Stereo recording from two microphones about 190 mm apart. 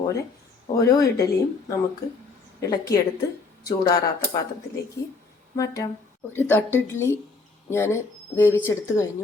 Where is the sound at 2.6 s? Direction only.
20° left (ahead or behind).